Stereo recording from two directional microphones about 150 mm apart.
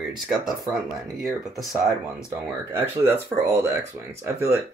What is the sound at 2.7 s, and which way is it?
Speech, 15° right (ahead or behind).